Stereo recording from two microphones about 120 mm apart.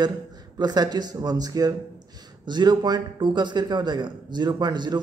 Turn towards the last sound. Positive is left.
turn(degrees=-35)  # may be behind; listen again after turning